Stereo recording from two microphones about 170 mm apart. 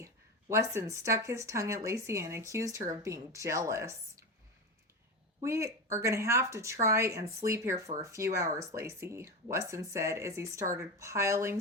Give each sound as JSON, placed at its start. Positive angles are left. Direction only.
{"t": 0.0, "sound": "speech", "side_deg": -15}
{"t": 5.4, "sound": "speech", "side_deg": -15}